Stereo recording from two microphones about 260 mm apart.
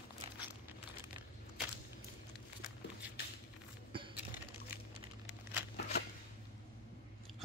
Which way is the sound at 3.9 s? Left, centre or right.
Centre.